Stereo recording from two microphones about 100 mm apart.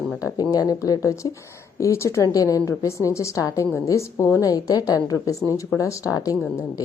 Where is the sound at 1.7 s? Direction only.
30° left (ahead or behind).